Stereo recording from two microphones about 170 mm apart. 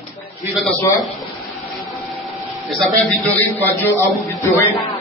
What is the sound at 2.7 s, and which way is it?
A man's voice, 5° left (ahead or behind).